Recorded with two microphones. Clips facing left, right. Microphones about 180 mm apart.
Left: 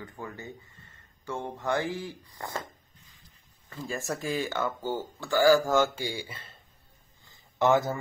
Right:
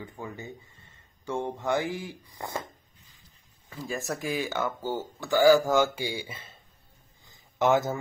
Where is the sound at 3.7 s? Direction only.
10° right (ahead or behind).